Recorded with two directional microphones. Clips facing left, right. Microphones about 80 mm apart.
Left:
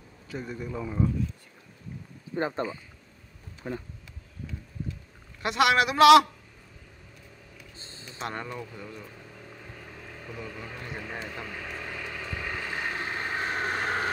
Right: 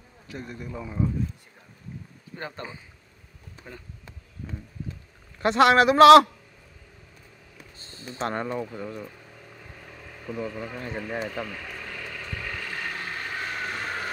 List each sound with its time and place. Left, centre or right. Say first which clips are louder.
0.3 s speech: left 2 dB; centre
2.3 s speech: left 8 dB; left
3.6 s speech: left 9 dB; left
4.4 s speech: right 2 dB; centre
5.4 s a man's voice: right 5 dB; right
7.7 s a sound: even; left
8.0 s a man's voice: right 6 dB; right
9.5 s vehicle: even; centre
10.2 s speech: right 8 dB; centre
11.4 s vehicle: even; centre; by 14.0 s left